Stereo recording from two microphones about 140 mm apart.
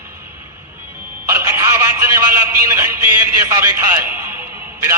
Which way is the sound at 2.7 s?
20° right (ahead or behind).